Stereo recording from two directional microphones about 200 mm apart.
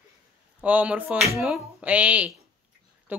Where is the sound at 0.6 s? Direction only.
5° right (ahead or behind).